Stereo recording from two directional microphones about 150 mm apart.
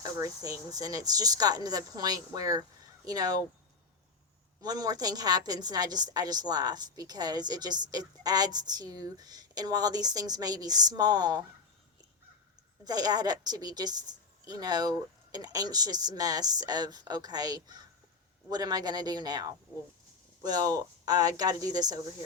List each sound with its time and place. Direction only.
0.0 s a woman's voice: 25° right (ahead or behind)
4.6 s a woman's voice: 25° right (ahead or behind)
12.8 s a woman's voice: 25° right (ahead or behind)